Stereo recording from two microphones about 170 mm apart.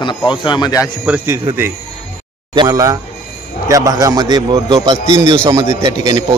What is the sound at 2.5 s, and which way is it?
A man's voice, 20° right (ahead or behind).